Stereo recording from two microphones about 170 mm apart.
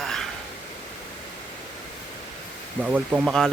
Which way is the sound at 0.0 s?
Centre (ahead or behind).